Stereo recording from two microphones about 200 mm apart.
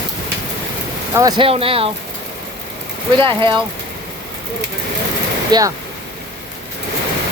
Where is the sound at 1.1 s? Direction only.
20° right (ahead or behind).